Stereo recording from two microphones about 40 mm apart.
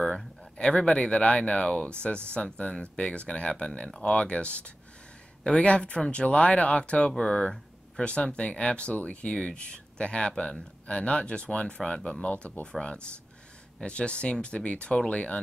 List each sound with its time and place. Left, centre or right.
0.6 s speech: centre; by 12.5 s left
13.8 s speech: left